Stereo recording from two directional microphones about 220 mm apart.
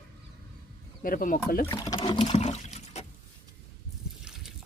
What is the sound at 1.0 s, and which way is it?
Speech, 40° left (ahead or behind).